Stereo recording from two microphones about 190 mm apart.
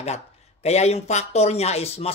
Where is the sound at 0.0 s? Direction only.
35° left (ahead or behind).